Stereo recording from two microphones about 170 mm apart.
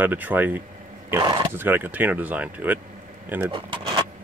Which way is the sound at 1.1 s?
25° right (ahead or behind).